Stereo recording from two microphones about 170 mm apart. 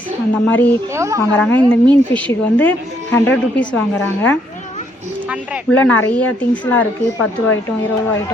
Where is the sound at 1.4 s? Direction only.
10° left (ahead or behind).